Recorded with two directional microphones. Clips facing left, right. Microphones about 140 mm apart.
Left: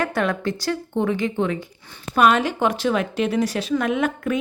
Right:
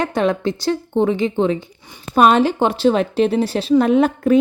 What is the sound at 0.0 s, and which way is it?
A woman's voice, 20° right (ahead or behind).